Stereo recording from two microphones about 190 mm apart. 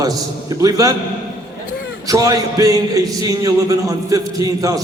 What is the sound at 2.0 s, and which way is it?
A man's voice, 20° right (ahead or behind).